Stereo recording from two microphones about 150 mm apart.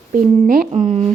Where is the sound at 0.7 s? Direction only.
50° right (ahead or behind).